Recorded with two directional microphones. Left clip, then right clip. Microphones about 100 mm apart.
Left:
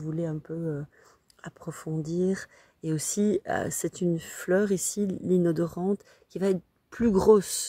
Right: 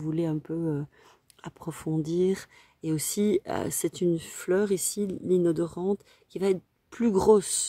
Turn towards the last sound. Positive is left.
turn(degrees=-5)  # may be behind; listen again after turning